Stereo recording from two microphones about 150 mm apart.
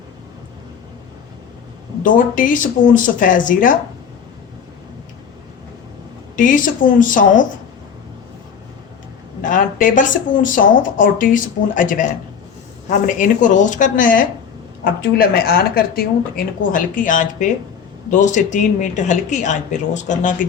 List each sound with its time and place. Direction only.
2.0 s speech: 65° left (ahead or behind)
6.3 s speech: 60° left (ahead or behind)
9.4 s speech: 60° left (ahead or behind)
15.1 s speech: 90° left
16.7 s speech: 65° left (ahead or behind)